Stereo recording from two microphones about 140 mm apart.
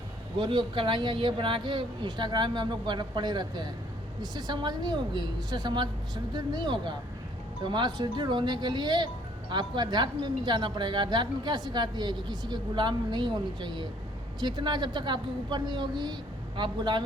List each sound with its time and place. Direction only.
0.3 s a woman's voice: 35° right (ahead or behind)